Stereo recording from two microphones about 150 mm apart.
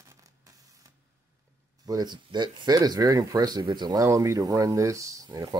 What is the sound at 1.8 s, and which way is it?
Speech, 25° right (ahead or behind).